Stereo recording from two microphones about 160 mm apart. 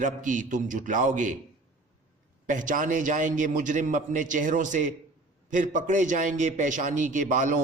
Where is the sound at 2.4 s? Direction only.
55° right (ahead or behind).